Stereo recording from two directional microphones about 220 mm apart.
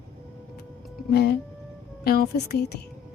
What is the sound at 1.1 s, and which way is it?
A woman's voice, 45° left (ahead or behind).